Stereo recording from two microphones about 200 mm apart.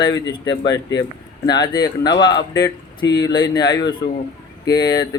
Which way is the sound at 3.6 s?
20° left (ahead or behind).